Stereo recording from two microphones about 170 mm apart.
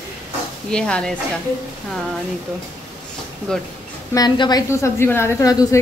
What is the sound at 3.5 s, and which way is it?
Speech, 5° left (ahead or behind).